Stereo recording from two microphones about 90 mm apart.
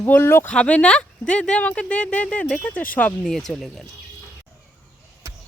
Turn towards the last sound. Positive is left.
turn(degrees=0)  # may be behind; listen again after turning